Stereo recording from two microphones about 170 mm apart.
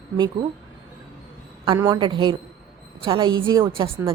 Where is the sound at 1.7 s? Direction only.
15° right (ahead or behind).